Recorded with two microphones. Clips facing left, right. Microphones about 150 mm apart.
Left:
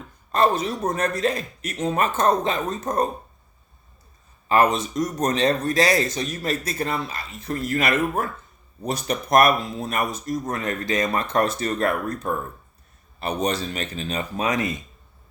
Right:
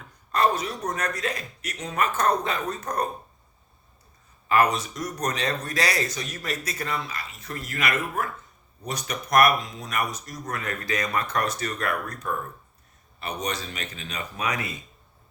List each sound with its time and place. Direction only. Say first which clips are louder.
0.3 s a man's voice: left 3 dB; 25° left (ahead or behind)
4.4 s speech: left 3 dB; 25° left (ahead or behind)